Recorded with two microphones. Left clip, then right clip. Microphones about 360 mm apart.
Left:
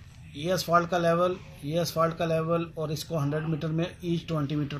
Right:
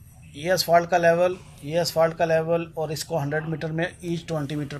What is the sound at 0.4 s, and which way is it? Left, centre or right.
Speech, right.